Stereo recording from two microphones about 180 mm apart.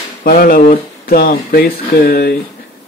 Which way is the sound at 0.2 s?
55° left (ahead or behind).